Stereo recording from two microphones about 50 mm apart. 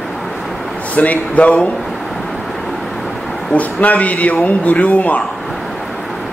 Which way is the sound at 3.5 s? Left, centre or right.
Left.